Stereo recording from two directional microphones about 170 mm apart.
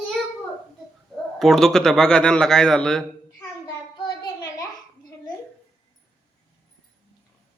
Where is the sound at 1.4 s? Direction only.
Centre (ahead or behind).